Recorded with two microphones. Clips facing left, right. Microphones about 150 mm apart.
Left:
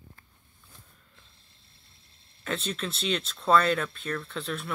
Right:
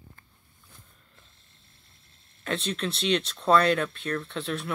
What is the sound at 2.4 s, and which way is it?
Speech, centre (ahead or behind).